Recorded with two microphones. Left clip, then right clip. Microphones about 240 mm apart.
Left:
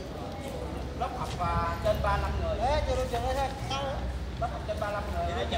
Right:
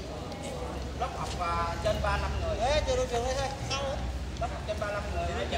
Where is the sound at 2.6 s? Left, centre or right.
Centre.